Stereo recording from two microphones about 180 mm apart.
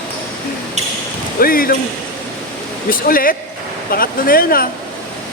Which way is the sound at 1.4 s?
55° left (ahead or behind).